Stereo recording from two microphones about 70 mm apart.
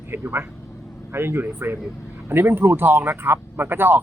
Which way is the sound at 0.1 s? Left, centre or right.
Right.